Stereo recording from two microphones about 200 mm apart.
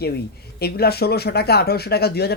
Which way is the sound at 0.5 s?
50° left (ahead or behind).